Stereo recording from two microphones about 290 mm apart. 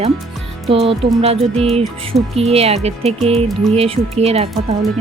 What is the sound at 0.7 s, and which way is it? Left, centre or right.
Speech, centre.